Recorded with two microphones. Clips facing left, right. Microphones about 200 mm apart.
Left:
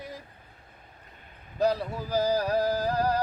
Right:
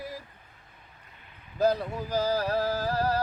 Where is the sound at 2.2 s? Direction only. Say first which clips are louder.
Left 2 dB; 15° left (ahead or behind).